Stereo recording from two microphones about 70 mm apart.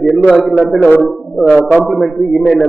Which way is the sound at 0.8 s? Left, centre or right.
Left.